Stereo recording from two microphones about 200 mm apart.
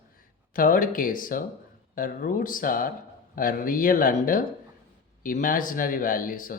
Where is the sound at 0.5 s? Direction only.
45° left (ahead or behind).